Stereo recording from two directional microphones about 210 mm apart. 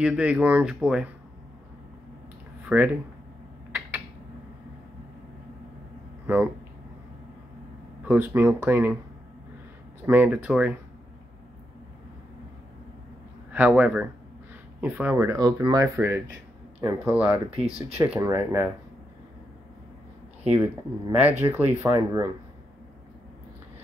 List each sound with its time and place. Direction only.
0.0 s speech: 5° right (ahead or behind)
2.6 s speech: 10° right (ahead or behind)
6.2 s speech: 10° right (ahead or behind)
8.0 s speech: 10° right (ahead or behind)
10.0 s speech: 10° right (ahead or behind)
13.5 s speech: 10° right (ahead or behind)
21.2 s speech: 10° right (ahead or behind)